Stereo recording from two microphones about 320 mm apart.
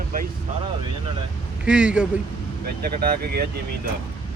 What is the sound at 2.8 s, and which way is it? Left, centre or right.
Speech, right.